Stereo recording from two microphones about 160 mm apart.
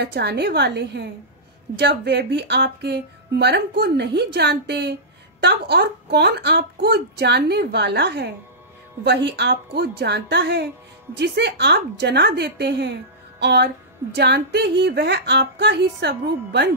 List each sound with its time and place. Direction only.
0.0 s a woman's voice: 90° right